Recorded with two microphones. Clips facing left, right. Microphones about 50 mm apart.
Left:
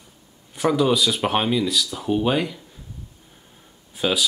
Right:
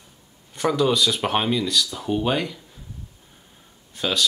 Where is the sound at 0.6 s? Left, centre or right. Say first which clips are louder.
Left 1 dB; centre.